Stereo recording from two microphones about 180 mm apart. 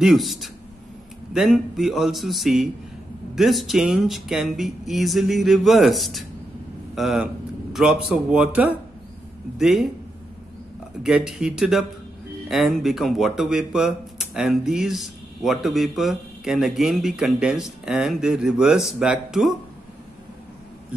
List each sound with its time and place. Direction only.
0.0 s a man's voice: centre (ahead or behind)
11.0 s speech: centre (ahead or behind)